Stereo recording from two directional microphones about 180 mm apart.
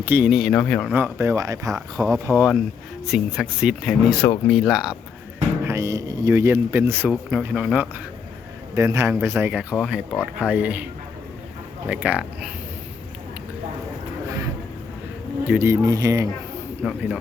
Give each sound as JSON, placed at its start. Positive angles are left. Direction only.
{"t": 0.0, "sound": "speech", "side_deg": -10}
{"t": 0.9, "sound": "speech", "side_deg": -15}
{"t": 5.6, "sound": "speech", "side_deg": -15}
{"t": 8.7, "sound": "speech", "side_deg": -15}
{"t": 11.9, "sound": "speech", "side_deg": -5}
{"t": 15.4, "sound": "speech", "side_deg": -15}
{"t": 16.8, "sound": "speech", "side_deg": -5}